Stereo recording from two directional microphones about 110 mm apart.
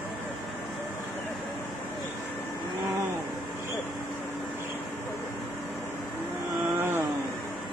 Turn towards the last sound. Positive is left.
turn(degrees=-20)  # may be behind; listen again after turning